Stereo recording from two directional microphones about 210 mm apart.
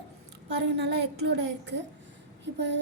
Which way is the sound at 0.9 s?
55° right (ahead or behind).